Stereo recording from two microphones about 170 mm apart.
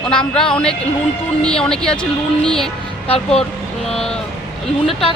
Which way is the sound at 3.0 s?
35° left (ahead or behind).